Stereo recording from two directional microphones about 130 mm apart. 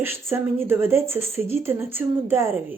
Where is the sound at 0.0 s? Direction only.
20° right (ahead or behind).